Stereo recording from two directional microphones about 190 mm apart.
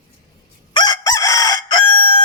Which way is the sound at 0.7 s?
20° left (ahead or behind).